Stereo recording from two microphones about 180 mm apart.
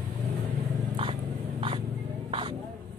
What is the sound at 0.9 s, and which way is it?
Vehicle, 30° right (ahead or behind).